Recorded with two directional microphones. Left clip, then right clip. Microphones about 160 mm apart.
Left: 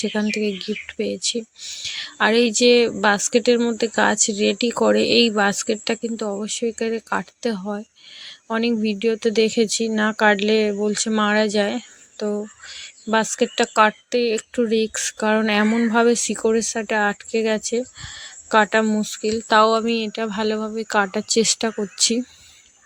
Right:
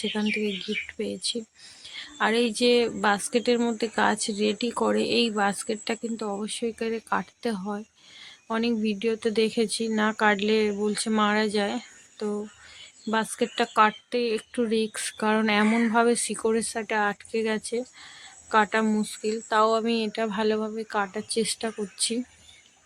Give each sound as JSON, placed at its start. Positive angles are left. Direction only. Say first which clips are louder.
{"t": 0.0, "sound": "a woman's voice", "louder": "left 5 dB", "side_deg": 30}
{"t": 19.5, "sound": "a woman's voice", "louder": "left 7 dB", "side_deg": 40}
{"t": 19.8, "sound": "speech", "louder": "left 4 dB", "side_deg": 20}
{"t": 20.8, "sound": "a woman's voice", "louder": "left 8 dB", "side_deg": 40}